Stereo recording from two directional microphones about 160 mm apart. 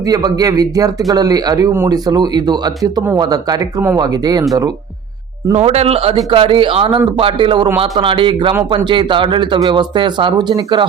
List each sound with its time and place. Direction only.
0.0 s speech: 25° right (ahead or behind)
5.5 s a man's voice: 40° right (ahead or behind)